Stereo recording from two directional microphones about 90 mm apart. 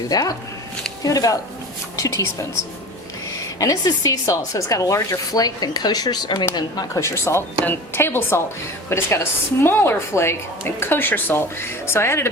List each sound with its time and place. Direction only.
0.1 s a woman's voice: 40° left (ahead or behind)
3.6 s speech: 40° left (ahead or behind)
7.0 s a woman's voice: 30° left (ahead or behind)